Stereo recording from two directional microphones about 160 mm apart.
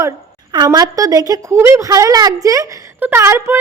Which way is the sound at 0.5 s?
25° right (ahead or behind).